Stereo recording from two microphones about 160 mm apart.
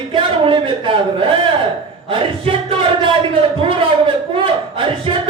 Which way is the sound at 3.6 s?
30° right (ahead or behind).